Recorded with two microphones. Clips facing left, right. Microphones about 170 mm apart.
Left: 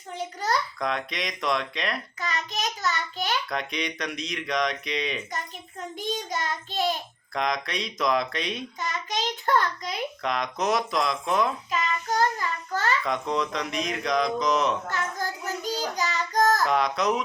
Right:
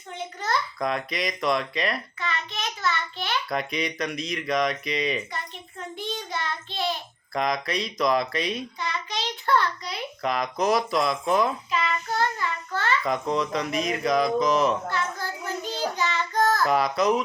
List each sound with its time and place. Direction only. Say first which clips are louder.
0.1 s a child's voice: left 1 dB; 35° left (ahead or behind)
0.8 s speech: right 2 dB; 5° right (ahead or behind)
2.2 s child singing: left 2 dB; 40° left (ahead or behind)
3.5 s speech: right 2 dB; 5° right (ahead or behind)
6.3 s child singing: left 2 dB; 45° left (ahead or behind)
7.3 s speech: right 2 dB; centre (ahead or behind)
8.8 s child singing: left 1 dB; 45° left (ahead or behind)
10.2 s speech: right 3 dB; 5° right (ahead or behind)
11.7 s child singing: even; 40° left (ahead or behind)
13.1 s speech: right 2 dB; centre (ahead or behind)
14.8 s child singing: right 1 dB; 45° left (ahead or behind)
16.6 s speech: right 2 dB; 5° right (ahead or behind)